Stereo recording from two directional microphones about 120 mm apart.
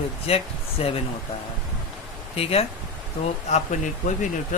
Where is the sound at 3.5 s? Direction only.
85° left.